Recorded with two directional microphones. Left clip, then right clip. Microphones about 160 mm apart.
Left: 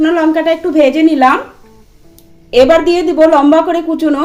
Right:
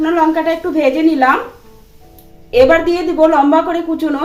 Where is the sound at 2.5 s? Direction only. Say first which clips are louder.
Left 2 dB; 55° left (ahead or behind).